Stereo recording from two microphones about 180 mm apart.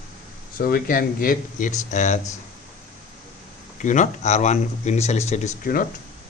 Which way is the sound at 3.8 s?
45° left (ahead or behind).